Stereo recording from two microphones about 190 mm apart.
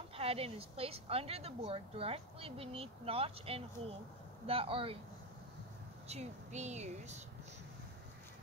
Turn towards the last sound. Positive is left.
turn(degrees=-35)  # may be behind; listen again after turning